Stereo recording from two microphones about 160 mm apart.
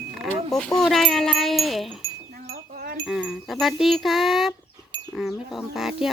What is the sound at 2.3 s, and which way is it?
Wind chime, 65° right (ahead or behind).